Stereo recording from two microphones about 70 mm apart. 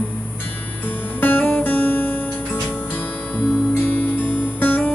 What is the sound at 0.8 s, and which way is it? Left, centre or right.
Music, left.